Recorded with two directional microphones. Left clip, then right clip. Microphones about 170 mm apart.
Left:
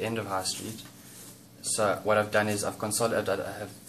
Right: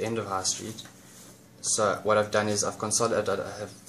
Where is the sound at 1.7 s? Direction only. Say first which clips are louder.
Right 1 dB; 55° right (ahead or behind).